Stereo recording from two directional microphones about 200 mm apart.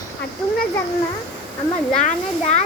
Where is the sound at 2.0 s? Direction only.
35° left (ahead or behind).